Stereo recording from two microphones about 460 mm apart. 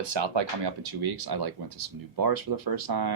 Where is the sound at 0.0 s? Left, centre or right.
Right.